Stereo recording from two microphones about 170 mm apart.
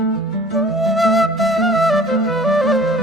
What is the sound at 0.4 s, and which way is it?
Flute, centre (ahead or behind).